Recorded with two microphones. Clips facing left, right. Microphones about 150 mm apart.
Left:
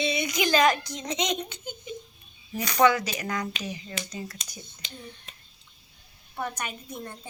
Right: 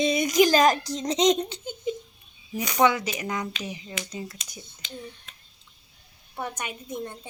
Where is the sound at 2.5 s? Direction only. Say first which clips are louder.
Even; 20° right (ahead or behind).